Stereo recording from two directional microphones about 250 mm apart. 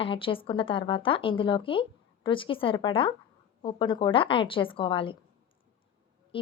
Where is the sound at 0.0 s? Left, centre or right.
Left.